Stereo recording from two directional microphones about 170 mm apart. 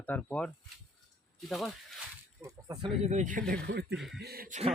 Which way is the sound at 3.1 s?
45° right (ahead or behind).